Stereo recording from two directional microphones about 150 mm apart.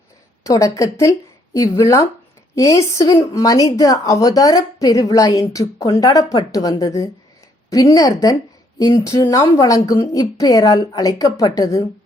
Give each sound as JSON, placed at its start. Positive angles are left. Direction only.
{"t": 0.4, "sound": "a woman's voice", "side_deg": 20}